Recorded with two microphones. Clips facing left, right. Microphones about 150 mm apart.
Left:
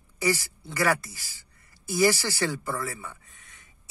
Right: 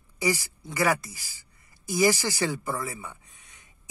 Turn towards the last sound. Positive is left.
turn(degrees=-15)  # may be behind; listen again after turning